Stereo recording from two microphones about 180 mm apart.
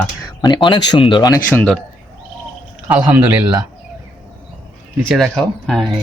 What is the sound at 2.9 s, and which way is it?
Speech, 10° right (ahead or behind).